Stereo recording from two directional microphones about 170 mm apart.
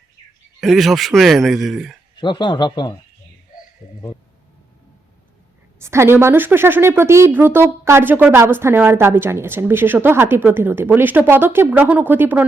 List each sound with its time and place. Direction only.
0.6 s a man's voice: centre (ahead or behind)
2.2 s speech: 25° left (ahead or behind)
5.8 s speech: 15° right (ahead or behind)